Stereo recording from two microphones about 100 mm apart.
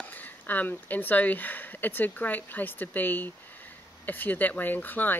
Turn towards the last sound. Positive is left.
turn(degrees=20)  # may be behind; listen again after turning